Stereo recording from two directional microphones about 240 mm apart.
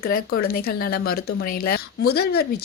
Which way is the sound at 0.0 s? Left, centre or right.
Left.